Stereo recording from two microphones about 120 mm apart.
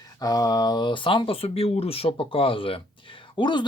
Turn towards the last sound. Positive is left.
turn(degrees=40)  # may be behind; listen again after turning